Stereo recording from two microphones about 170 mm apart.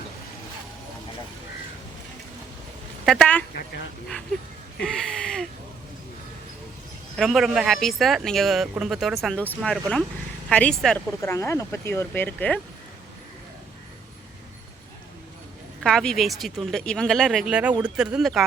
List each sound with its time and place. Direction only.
3.1 s speech: 5° left (ahead or behind)
4.8 s speech: 5° left (ahead or behind)
7.2 s speech: centre (ahead or behind)
11.2 s speech: 15° left (ahead or behind)
15.8 s speech: 5° left (ahead or behind)